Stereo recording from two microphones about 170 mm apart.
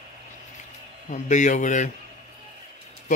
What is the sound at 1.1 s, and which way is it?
Speech, 45° left (ahead or behind).